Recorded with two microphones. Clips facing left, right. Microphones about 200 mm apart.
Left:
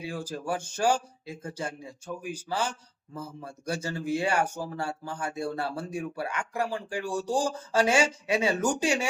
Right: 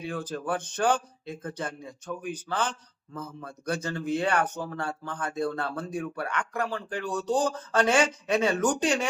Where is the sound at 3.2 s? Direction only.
30° left (ahead or behind).